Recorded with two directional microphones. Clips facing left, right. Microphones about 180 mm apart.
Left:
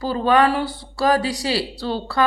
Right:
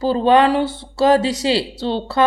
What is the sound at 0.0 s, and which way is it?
A woman's voice, 25° right (ahead or behind).